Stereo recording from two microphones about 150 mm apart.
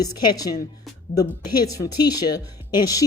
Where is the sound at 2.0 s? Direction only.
25° left (ahead or behind).